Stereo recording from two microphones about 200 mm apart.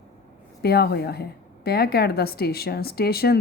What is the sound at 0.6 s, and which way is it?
Speech, 50° left (ahead or behind).